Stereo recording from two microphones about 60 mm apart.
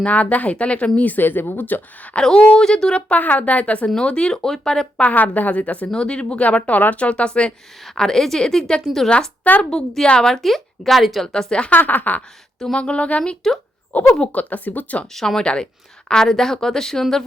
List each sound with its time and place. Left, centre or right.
0.0 s a woman's voice: left
2.1 s a woman's voice: centre
3.8 s a woman's voice: centre
4.9 s a woman's voice: left
5.9 s a woman's voice: centre
7.9 s a woman's voice: centre
9.0 s a woman's voice: centre
9.6 s a woman's voice: centre
11.3 s a woman's voice: centre
11.8 s a woman's voice: left
12.5 s a woman's voice: centre
15.1 s a woman's voice: centre